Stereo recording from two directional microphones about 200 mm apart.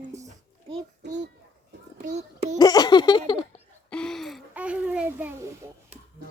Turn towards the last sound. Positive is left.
turn(degrees=-10)  # may be behind; listen again after turning